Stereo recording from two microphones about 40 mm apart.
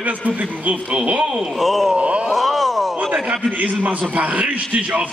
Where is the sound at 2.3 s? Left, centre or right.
Centre.